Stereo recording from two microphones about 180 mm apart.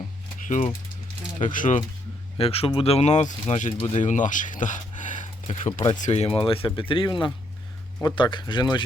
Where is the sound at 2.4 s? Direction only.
35° left (ahead or behind).